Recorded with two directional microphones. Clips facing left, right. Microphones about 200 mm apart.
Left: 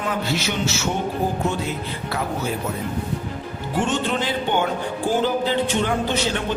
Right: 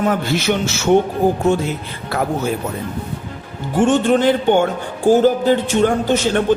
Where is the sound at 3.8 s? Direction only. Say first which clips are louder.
Right 9 dB; 50° right (ahead or behind).